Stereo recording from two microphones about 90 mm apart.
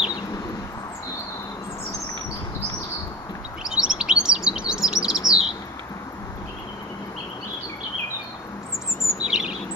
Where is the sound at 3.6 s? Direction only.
10° right (ahead or behind).